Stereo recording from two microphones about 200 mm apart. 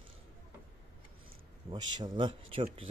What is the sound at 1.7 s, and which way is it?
Speech, 25° right (ahead or behind).